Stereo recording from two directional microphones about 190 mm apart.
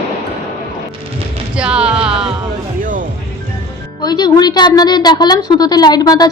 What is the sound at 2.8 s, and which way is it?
Music, 45° right (ahead or behind).